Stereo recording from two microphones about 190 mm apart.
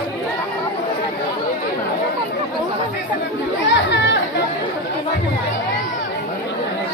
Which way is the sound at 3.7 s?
70° left (ahead or behind).